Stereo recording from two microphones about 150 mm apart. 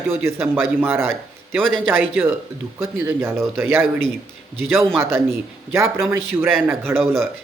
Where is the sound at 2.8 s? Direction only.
15° right (ahead or behind).